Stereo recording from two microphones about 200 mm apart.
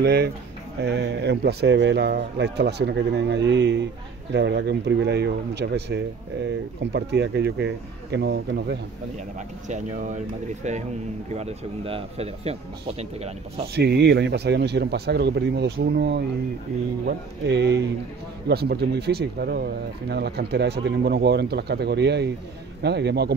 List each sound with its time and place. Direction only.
0.0 s speech: 55° right (ahead or behind)
9.7 s speech: 35° right (ahead or behind)
13.7 s speech: 55° right (ahead or behind)